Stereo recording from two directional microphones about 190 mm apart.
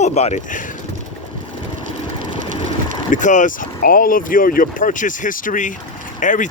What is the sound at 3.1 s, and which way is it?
Speech, 40° left (ahead or behind).